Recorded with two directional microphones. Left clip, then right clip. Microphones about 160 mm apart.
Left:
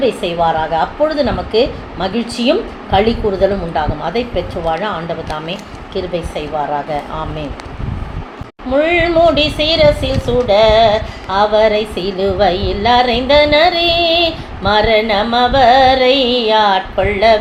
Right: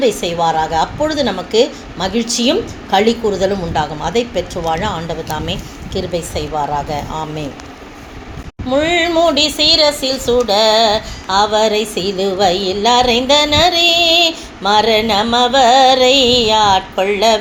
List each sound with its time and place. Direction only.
0.0 s speech: 45° right (ahead or behind)
8.7 s speech: 50° right (ahead or behind)